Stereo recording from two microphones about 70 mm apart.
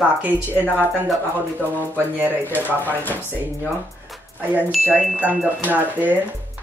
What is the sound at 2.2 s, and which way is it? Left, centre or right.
Speech, right.